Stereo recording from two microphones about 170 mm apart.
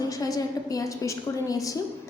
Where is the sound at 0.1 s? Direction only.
20° left (ahead or behind).